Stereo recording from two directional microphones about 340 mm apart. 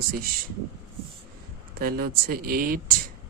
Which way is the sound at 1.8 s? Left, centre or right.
Right.